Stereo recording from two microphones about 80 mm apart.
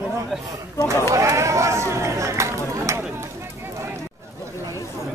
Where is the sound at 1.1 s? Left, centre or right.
Right.